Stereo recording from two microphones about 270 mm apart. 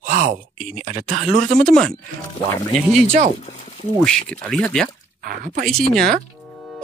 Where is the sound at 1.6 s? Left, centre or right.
Centre.